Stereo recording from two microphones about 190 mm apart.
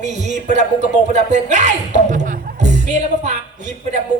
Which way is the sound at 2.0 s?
40° right (ahead or behind).